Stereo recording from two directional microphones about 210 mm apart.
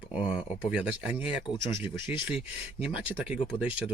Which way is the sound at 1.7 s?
25° left (ahead or behind).